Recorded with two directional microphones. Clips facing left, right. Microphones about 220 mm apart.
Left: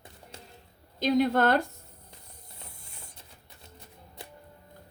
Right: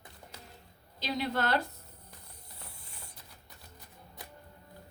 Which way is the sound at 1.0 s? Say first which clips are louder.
Left 9 dB; 50° left (ahead or behind).